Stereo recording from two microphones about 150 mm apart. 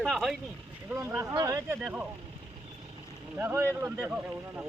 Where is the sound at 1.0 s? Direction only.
15° right (ahead or behind).